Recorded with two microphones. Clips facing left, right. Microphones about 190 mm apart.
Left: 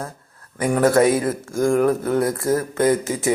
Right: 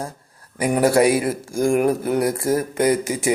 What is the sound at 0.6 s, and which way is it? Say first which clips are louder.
Speech: even; 10° right (ahead or behind).